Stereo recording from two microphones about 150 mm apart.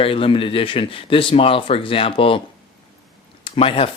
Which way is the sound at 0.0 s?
35° left (ahead or behind).